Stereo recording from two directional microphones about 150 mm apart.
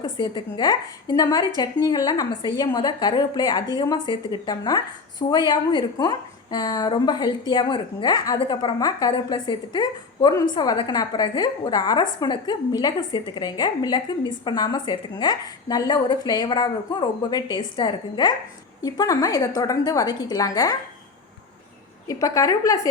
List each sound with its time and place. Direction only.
0.0 s a woman's voice: 30° left (ahead or behind)
22.0 s a woman's voice: 20° left (ahead or behind)